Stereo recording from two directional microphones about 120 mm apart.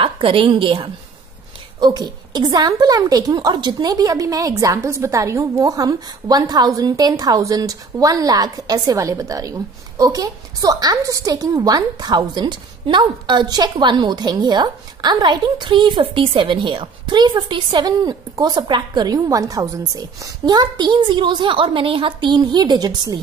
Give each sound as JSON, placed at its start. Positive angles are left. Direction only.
{"t": 0.0, "sound": "a woman's voice", "side_deg": -45}